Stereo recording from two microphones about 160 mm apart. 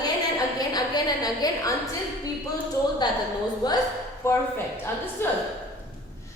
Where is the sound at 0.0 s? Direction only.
25° left (ahead or behind).